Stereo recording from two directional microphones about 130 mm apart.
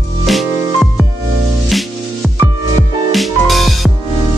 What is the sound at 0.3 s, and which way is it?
Music, centre (ahead or behind).